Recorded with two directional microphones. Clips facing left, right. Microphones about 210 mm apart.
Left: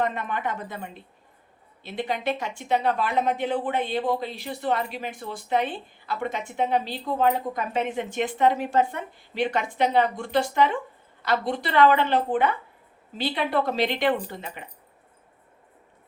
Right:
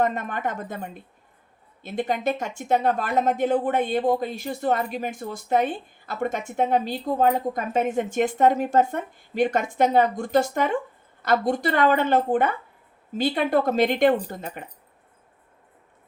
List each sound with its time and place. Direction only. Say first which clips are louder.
0.0 s speech: right 3 dB; 45° right (ahead or behind)